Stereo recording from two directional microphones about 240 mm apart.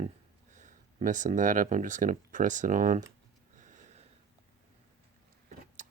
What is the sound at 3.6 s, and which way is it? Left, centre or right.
Sniff, right.